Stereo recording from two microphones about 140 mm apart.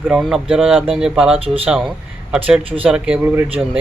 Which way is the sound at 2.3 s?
10° right (ahead or behind).